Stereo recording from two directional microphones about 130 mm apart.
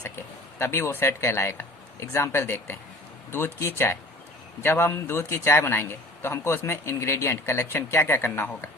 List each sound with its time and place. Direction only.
0.0 s a man's voice: 20° left (ahead or behind)